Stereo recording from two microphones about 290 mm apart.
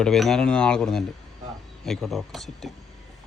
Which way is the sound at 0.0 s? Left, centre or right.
Centre.